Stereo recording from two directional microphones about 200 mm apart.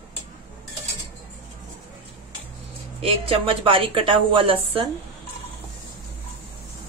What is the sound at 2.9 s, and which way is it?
A woman's voice, 30° right (ahead or behind).